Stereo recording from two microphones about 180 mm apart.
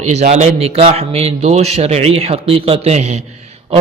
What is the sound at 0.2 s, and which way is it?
A man's voice, 40° right (ahead or behind).